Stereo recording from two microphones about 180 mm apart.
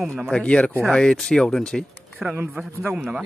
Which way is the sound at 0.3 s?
5° left (ahead or behind).